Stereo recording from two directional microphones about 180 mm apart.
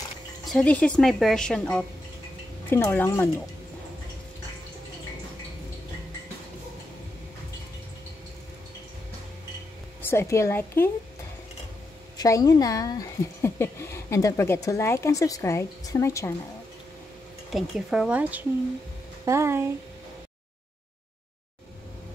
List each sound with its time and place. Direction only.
0.5 s a woman's voice: 5° left (ahead or behind)
10.0 s speech: 15° left (ahead or behind)
12.2 s speech: 20° left (ahead or behind)
17.5 s a woman's voice: centre (ahead or behind)